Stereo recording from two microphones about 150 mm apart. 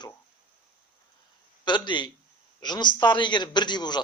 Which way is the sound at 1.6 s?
30° left (ahead or behind).